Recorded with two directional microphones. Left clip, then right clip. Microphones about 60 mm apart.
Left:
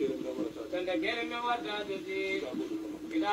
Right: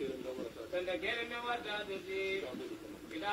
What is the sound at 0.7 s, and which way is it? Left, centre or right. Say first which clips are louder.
A man's voice: left 4 dB; left.